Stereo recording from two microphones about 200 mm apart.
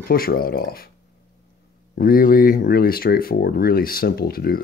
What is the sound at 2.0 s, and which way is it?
Speech, 45° left (ahead or behind).